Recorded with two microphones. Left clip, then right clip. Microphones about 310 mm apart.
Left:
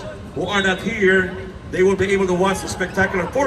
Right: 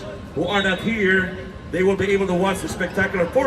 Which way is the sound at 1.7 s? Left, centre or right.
Left.